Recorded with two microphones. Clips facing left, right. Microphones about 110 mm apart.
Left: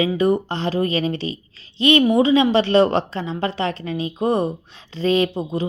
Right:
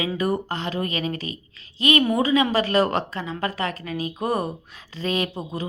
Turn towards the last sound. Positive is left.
turn(degrees=30)  # may be behind; listen again after turning